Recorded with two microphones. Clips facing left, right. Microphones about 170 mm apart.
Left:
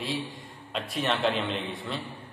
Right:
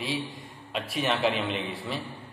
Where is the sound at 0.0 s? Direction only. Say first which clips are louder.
Right 1 dB; centre (ahead or behind).